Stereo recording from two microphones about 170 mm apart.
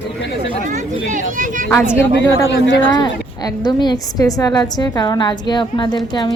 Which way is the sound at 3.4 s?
25° left (ahead or behind).